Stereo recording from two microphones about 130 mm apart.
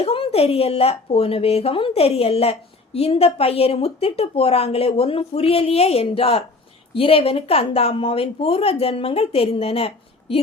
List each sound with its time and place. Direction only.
0.0 s speech: 50° left (ahead or behind)